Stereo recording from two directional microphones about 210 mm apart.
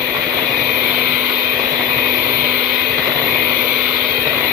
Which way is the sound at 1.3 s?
45° right (ahead or behind).